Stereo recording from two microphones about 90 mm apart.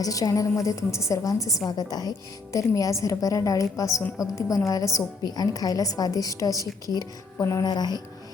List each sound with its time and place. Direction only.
0.0 s a woman's voice: 40° left (ahead or behind)